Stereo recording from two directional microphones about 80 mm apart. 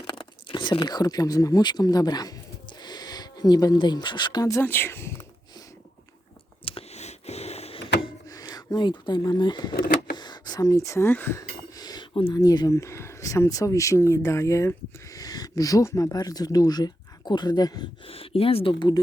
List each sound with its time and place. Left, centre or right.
0.1 s speech: left
4.6 s speech: left
8.3 s speech: left
10.2 s a sound: left
11.1 s speech: left
11.8 s a sound: left
12.4 s speech: left
12.7 s speech: left
16.1 s speech: left
18.6 s speech: left